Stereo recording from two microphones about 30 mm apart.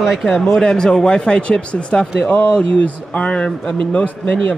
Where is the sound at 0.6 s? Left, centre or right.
Left.